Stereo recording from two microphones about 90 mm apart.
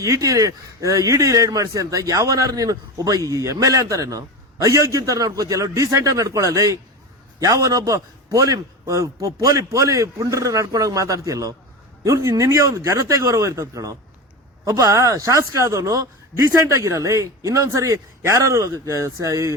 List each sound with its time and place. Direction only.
0.0 s speech: 35° right (ahead or behind)